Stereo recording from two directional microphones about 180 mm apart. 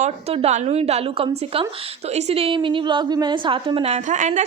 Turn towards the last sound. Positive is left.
turn(degrees=-45)  # may be behind; listen again after turning